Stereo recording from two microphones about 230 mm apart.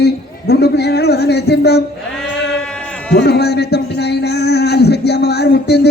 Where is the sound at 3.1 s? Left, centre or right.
Left.